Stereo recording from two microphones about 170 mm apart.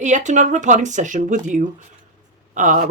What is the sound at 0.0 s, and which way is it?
A woman's voice, 45° right (ahead or behind).